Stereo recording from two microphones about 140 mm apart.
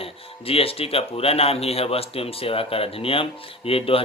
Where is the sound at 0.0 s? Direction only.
45° left (ahead or behind).